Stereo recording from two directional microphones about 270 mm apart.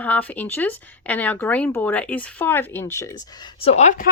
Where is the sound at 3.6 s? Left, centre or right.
Left.